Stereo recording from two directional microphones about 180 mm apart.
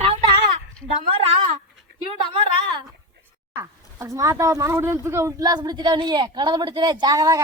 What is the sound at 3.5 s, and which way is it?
Speech, 15° right (ahead or behind).